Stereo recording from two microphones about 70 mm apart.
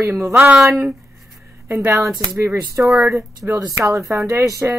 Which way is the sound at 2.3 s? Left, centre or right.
Right.